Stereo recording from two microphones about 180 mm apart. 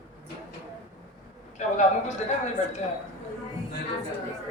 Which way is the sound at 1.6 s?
40° left (ahead or behind).